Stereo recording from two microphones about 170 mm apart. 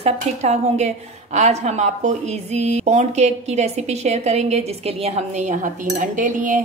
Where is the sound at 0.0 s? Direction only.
40° right (ahead or behind).